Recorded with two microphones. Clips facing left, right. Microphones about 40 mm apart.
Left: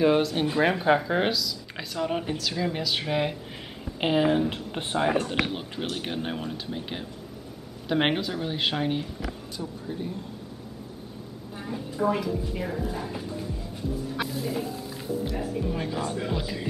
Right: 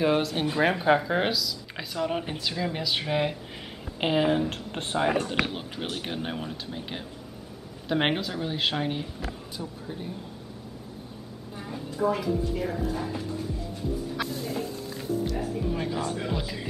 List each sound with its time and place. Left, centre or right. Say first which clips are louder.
0.0 s speech: left 2 dB; centre
2.2 s speech: left 2 dB; centre
2.5 s speech: even; centre
11.6 s a woman's voice: left 1 dB; centre
14.1 s music: left 1 dB; centre
15.2 s speech: even; centre